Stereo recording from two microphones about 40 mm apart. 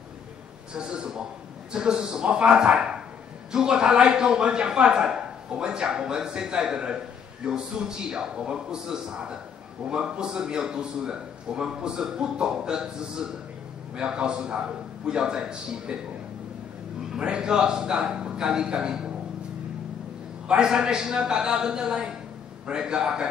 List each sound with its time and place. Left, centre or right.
0.7 s a man's voice: right
17.2 s a man's voice: right
20.4 s a man's voice: right